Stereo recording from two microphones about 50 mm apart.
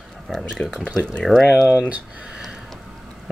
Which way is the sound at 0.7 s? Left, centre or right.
Centre.